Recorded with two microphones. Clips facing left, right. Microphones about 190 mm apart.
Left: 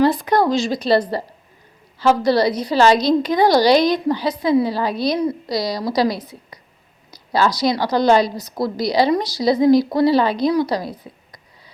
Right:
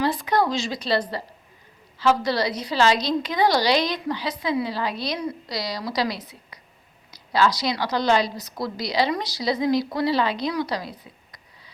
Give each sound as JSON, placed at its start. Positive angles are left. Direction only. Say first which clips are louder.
{"t": 0.0, "sound": "a woman's voice", "louder": "left 6 dB", "side_deg": 45}
{"t": 7.6, "sound": "a woman's voice", "louder": "left 7 dB", "side_deg": 40}